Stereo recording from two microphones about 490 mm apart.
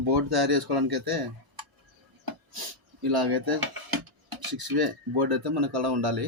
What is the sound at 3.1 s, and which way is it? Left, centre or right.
Dishes, right.